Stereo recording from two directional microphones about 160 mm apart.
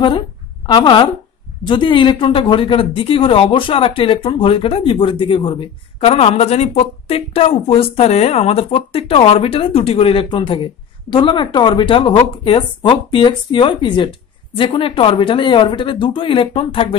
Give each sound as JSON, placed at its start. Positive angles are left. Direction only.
{"t": 0.7, "sound": "speech", "side_deg": 30}